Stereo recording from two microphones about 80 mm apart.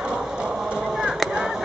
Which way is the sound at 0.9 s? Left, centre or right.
Centre.